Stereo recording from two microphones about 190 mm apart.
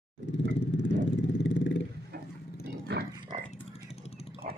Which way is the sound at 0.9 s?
75° left (ahead or behind).